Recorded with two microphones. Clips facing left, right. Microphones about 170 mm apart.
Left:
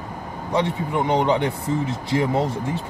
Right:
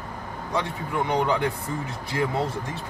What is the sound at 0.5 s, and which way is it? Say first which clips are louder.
Speech: left 5 dB; 20° left (ahead or behind).